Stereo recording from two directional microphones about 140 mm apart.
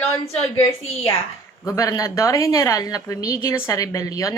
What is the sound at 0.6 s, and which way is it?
Speech, 45° left (ahead or behind).